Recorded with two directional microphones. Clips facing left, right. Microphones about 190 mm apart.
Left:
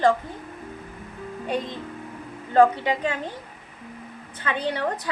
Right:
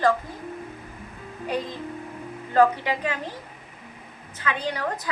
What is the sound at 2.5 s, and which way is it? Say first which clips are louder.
Speech: left 2 dB; 25° left (ahead or behind).